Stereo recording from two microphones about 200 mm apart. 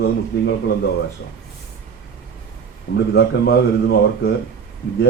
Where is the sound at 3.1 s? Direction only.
50° left (ahead or behind).